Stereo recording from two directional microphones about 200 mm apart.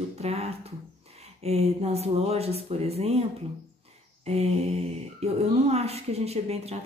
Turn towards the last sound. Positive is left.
turn(degrees=-30)  # may be behind; listen again after turning